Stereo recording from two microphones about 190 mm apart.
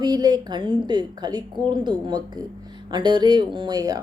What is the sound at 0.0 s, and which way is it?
Speech, 20° right (ahead or behind).